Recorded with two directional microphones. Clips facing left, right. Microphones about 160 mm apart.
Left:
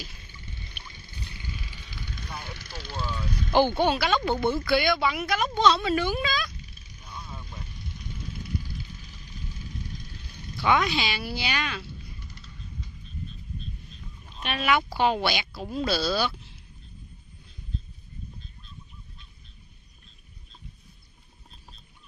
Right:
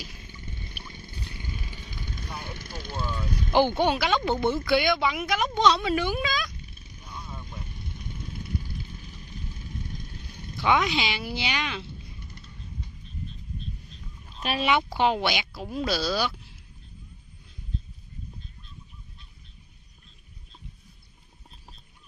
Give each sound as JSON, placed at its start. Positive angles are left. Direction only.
{"t": 0.5, "sound": "a sound", "side_deg": -45}
{"t": 0.9, "sound": "vehicle", "side_deg": -50}
{"t": 2.2, "sound": "vehicle", "side_deg": -15}
{"t": 2.5, "sound": "speech", "side_deg": -50}
{"t": 3.4, "sound": "speech", "side_deg": -15}
{"t": 7.7, "sound": "vehicle", "side_deg": -55}
{"t": 10.6, "sound": "speech", "side_deg": -15}
{"t": 14.4, "sound": "speech", "side_deg": -30}
{"t": 15.0, "sound": "speech", "side_deg": -15}